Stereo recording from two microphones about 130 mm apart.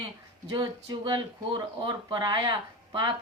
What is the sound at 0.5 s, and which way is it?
Speech, 30° right (ahead or behind).